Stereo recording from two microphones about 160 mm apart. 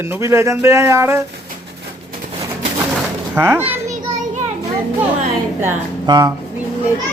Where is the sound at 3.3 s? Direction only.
15° right (ahead or behind).